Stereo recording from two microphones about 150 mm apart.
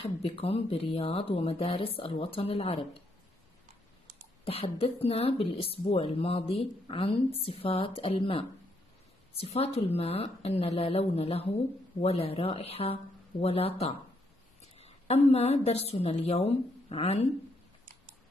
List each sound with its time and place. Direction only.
0.0 s speech: 40° left (ahead or behind)
4.5 s speech: 40° left (ahead or behind)
15.3 s a woman's voice: 45° left (ahead or behind)